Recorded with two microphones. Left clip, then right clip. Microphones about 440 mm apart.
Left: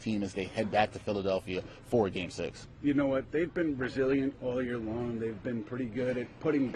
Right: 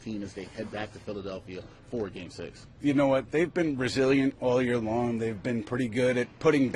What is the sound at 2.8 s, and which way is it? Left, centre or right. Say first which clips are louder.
A man's voice: right 5 dB; right.